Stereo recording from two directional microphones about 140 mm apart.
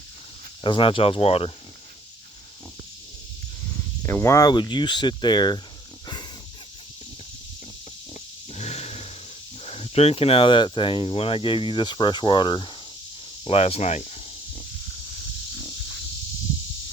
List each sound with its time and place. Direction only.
0.6 s speech: 40° left (ahead or behind)
3.7 s speech: 20° left (ahead or behind)
8.1 s a sound: 50° left (ahead or behind)
9.6 s speech: 45° left (ahead or behind)
13.5 s speech: 45° left (ahead or behind)